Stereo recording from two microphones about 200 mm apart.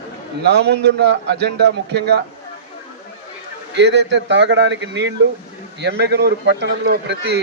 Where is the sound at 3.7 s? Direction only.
60° right (ahead or behind).